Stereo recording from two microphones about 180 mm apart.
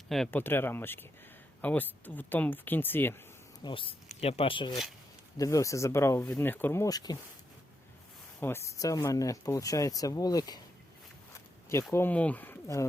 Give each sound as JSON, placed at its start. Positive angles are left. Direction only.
{"t": 0.1, "sound": "speech", "side_deg": 5}
{"t": 3.6, "sound": "speech", "side_deg": 30}
{"t": 8.4, "sound": "speech", "side_deg": 15}
{"t": 11.7, "sound": "speech", "side_deg": 15}